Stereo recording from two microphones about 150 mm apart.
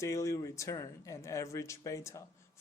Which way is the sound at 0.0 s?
20° left (ahead or behind).